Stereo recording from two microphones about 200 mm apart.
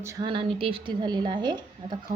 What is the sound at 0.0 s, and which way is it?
A woman's voice, 15° right (ahead or behind).